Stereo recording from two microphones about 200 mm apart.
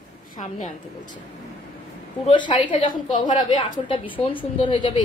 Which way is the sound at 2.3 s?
25° left (ahead or behind).